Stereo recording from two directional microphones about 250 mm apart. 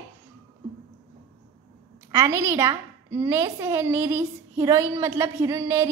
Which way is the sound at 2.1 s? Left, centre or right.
Centre.